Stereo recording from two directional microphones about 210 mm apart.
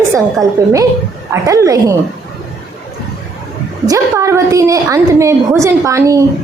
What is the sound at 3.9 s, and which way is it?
A woman's voice, 15° right (ahead or behind).